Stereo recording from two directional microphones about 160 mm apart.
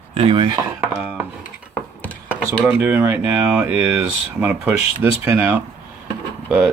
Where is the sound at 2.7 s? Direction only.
10° right (ahead or behind).